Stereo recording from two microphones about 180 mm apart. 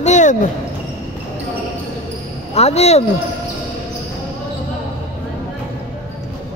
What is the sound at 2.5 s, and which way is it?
Speech, 35° left (ahead or behind).